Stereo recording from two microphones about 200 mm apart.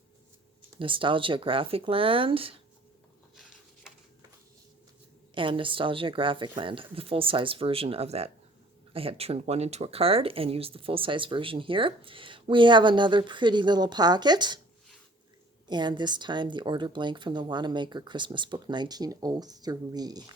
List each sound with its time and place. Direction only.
0.8 s speech: 25° right (ahead or behind)
5.3 s speech: 25° right (ahead or behind)
15.6 s speech: 20° right (ahead or behind)